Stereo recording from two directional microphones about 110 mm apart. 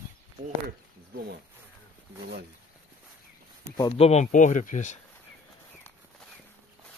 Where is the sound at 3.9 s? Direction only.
65° left (ahead or behind).